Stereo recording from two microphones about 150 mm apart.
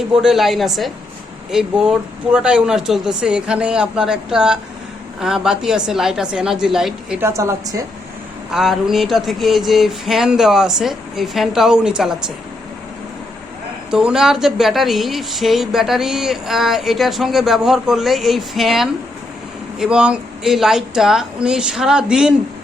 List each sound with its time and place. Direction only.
0.1 s speech: 5° right (ahead or behind)
7.2 s a woman's voice: 20° right (ahead or behind)
8.5 s speech: centre (ahead or behind)
13.9 s speech: 5° right (ahead or behind)